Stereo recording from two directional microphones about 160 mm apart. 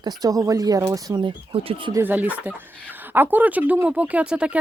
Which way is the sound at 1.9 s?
10° right (ahead or behind).